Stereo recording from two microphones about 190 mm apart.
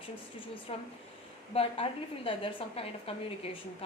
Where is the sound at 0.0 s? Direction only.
25° left (ahead or behind).